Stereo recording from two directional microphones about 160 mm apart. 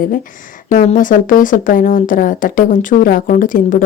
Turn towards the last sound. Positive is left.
turn(degrees=55)  # may be behind; listen again after turning